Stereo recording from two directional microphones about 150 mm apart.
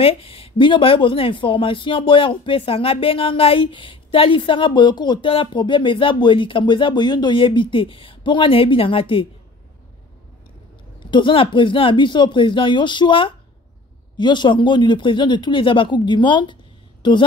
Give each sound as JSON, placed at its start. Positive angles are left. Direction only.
{"t": 0.0, "sound": "speech", "side_deg": 40}
{"t": 11.1, "sound": "speech", "side_deg": 30}